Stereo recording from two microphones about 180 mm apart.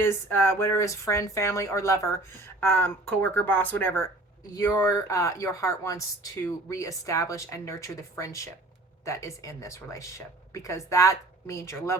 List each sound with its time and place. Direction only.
0.0 s a woman's voice: 15° left (ahead or behind)